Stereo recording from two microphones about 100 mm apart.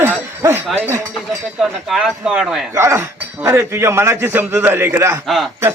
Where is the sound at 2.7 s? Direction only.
25° right (ahead or behind).